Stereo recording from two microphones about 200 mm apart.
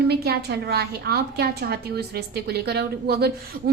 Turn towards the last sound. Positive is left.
turn(degrees=-55)  # may be behind; listen again after turning